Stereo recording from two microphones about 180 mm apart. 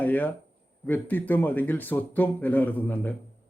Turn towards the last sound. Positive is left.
turn(degrees=10)  # may be behind; listen again after turning